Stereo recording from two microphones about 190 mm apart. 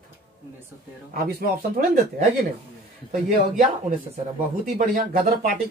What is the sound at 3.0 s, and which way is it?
Speech, 45° right (ahead or behind).